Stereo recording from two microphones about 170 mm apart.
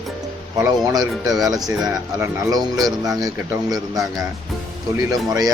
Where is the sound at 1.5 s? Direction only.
20° right (ahead or behind).